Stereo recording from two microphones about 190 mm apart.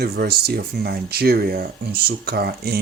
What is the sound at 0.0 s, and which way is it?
Speech, 55° right (ahead or behind).